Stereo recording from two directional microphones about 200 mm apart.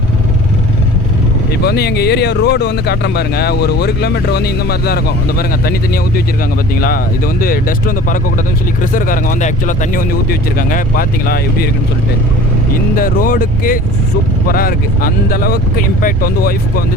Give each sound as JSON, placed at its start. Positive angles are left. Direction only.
{"t": 1.6, "sound": "speech", "side_deg": 55}
{"t": 13.0, "sound": "speech", "side_deg": 45}